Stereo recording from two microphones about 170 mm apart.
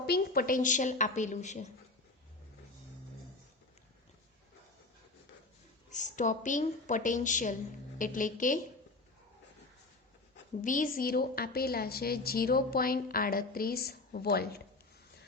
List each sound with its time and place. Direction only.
0.0 s a woman's voice: 65° left (ahead or behind); by 1.6 s 45° left (ahead or behind)
5.9 s a woman's voice: 45° left (ahead or behind)
10.6 s speech: 50° left (ahead or behind); by 14.6 s 70° left (ahead or behind)